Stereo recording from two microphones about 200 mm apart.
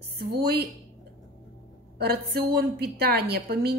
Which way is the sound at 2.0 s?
55° right (ahead or behind).